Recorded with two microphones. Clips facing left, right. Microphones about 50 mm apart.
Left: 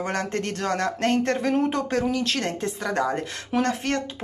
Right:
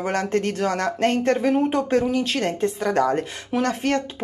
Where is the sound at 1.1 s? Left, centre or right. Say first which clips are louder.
Right 2 dB; centre.